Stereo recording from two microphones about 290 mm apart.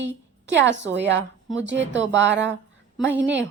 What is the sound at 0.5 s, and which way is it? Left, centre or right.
Speech, right.